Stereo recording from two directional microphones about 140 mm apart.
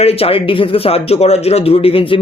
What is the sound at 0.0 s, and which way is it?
A man's voice, 45° left (ahead or behind).